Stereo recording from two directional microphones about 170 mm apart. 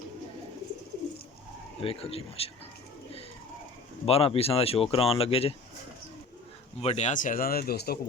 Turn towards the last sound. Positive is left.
turn(degrees=70)  # may be behind; listen again after turning